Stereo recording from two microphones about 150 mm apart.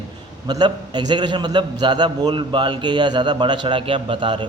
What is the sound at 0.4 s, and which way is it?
A man's voice, 30° right (ahead or behind).